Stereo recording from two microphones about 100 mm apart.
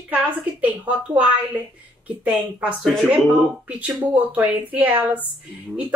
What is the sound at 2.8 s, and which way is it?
Speech, centre (ahead or behind).